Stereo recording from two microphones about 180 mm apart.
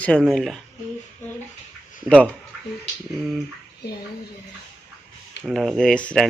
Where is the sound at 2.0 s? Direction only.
5° left (ahead or behind).